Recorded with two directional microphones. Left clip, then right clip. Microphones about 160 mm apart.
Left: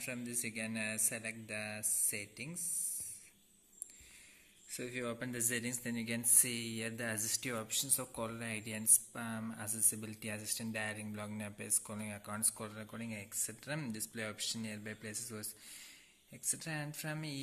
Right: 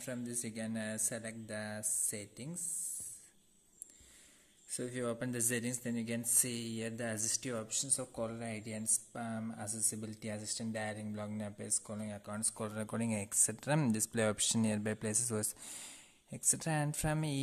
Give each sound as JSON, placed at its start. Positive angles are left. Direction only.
{"t": 0.0, "sound": "speech", "side_deg": -35}
{"t": 4.6, "sound": "speech", "side_deg": -40}